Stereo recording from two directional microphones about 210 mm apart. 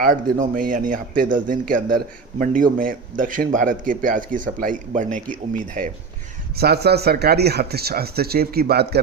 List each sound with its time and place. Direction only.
0.0 s speech: 40° right (ahead or behind)
6.6 s speech: 50° right (ahead or behind)